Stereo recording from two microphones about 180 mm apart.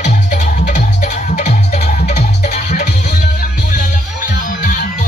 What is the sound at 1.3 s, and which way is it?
Music, 40° left (ahead or behind).